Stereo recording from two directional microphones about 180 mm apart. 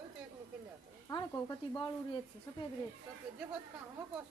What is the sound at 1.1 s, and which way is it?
Speech, 20° left (ahead or behind).